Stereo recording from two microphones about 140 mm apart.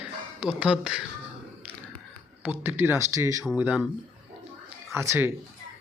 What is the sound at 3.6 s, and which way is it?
Speech, 10° right (ahead or behind).